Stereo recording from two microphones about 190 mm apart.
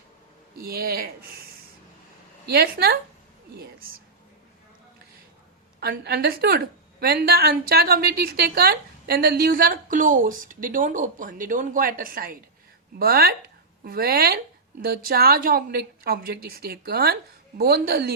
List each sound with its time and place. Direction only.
0.6 s a woman's voice: 55° right (ahead or behind)
2.5 s a woman's voice: 55° right (ahead or behind)
3.6 s a sound: 50° right (ahead or behind)
5.8 s a woman's voice: 55° right (ahead or behind)